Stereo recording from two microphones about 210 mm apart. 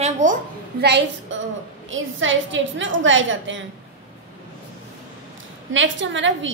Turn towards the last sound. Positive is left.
turn(degrees=-60)  # may be behind; listen again after turning